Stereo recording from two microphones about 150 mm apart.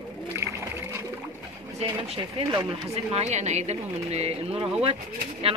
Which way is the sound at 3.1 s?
50° right (ahead or behind).